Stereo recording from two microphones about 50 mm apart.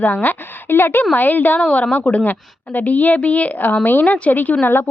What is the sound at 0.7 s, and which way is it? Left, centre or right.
Speech, left.